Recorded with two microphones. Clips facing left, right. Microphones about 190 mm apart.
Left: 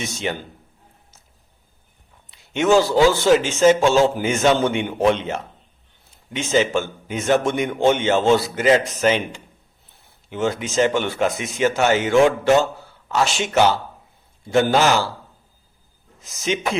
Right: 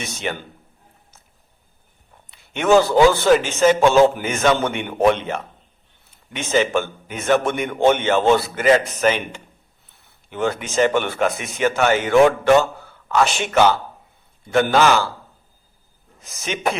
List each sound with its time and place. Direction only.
0.0 s speech: 55° right (ahead or behind)
2.3 s speech: 55° right (ahead or behind)
16.2 s speech: 55° right (ahead or behind)